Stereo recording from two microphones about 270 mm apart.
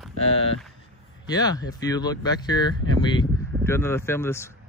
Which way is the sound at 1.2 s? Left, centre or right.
Centre.